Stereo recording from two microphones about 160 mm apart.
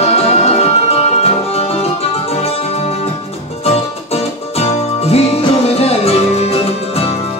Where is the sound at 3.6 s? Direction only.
40° left (ahead or behind).